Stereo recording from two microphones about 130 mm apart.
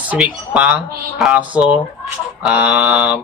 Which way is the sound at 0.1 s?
10° right (ahead or behind).